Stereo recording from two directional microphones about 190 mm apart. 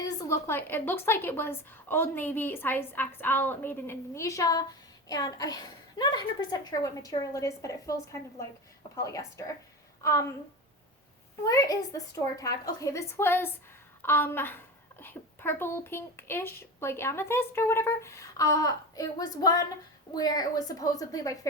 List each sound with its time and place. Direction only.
0.2 s a child's voice: 15° left (ahead or behind)
11.4 s a child's voice: 15° left (ahead or behind)